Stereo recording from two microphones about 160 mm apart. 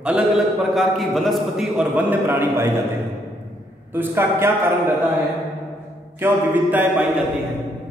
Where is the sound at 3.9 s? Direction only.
15° right (ahead or behind).